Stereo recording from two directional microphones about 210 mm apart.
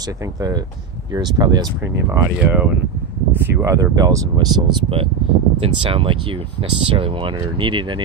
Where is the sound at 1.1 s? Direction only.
20° right (ahead or behind).